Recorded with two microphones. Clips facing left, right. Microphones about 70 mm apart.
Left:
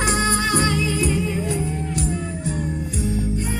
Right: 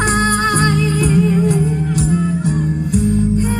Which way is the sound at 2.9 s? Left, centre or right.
Right.